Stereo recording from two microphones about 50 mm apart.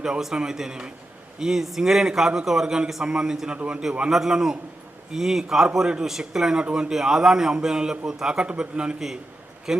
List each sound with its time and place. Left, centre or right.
0.2 s a man's voice: centre